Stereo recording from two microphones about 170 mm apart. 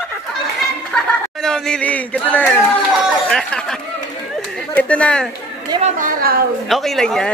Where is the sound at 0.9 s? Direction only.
5° left (ahead or behind).